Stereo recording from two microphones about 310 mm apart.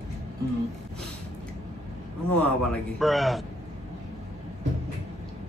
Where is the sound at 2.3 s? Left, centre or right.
Centre.